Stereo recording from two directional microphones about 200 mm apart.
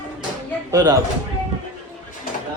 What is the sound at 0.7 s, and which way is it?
Speech, 20° right (ahead or behind).